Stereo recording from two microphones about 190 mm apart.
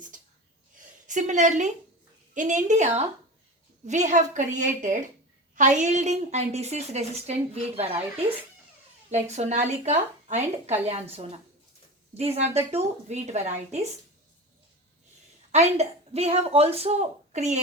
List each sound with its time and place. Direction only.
1.0 s a woman's voice: 40° right (ahead or behind)
9.3 s a woman's voice: 35° right (ahead or behind)
15.5 s a woman's voice: 35° right (ahead or behind)